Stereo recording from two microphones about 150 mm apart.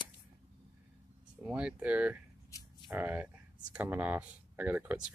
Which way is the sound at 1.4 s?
10° right (ahead or behind).